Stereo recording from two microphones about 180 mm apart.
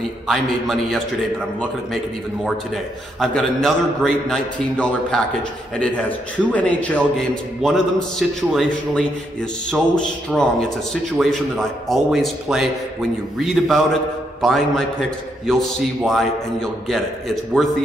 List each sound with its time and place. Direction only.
0.3 s a man's voice: centre (ahead or behind)
3.2 s a man's voice: centre (ahead or behind)
6.5 s a man's voice: 10° left (ahead or behind)